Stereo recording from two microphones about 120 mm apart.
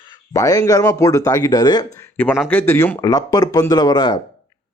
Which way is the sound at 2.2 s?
15° left (ahead or behind).